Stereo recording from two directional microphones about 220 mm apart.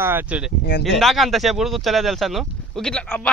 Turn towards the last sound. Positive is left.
turn(degrees=5)  # may be behind; listen again after turning